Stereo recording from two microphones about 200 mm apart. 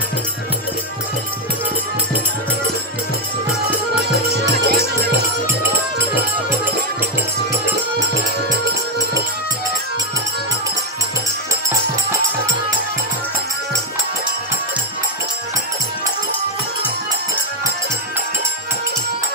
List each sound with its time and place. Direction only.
4.6 s music: 55° right (ahead or behind)